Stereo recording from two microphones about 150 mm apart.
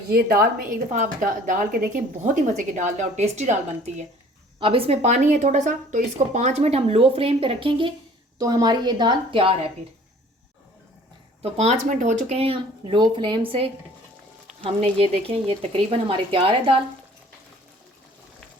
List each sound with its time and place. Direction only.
0.1 s a woman's voice: 90° right
0.9 s a woman's voice: 60° right (ahead or behind)
4.6 s speech: 40° right (ahead or behind)
8.4 s a woman's voice: 25° right (ahead or behind)
11.4 s a woman's voice: 45° right (ahead or behind)
14.9 s a woman's voice: 40° right (ahead or behind)